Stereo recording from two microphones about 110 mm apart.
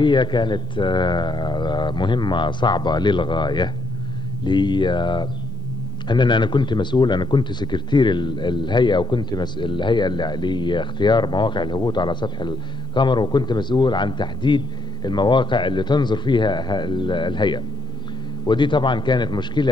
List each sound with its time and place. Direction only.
0.0 s speech: 45° left (ahead or behind)